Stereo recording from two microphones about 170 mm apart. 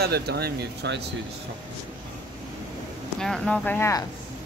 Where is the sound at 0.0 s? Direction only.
70° right (ahead or behind).